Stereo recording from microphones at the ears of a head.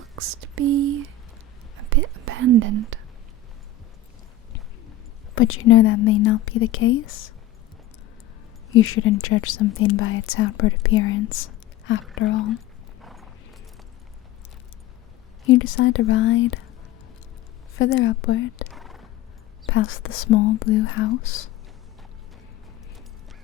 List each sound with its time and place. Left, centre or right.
0.2 s speech: right
1.7 s whispering: right
4.5 s speech: left
8.7 s speech: left
15.4 s speech: left
17.7 s speech: left